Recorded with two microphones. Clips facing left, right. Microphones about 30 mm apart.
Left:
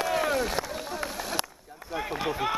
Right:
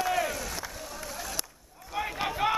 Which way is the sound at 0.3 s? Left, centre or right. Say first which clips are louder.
Left 8 dB; left.